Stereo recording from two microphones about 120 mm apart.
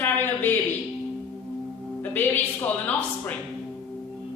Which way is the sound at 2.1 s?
15° left (ahead or behind).